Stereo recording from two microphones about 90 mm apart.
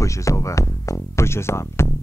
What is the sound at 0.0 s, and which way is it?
Music, 35° left (ahead or behind).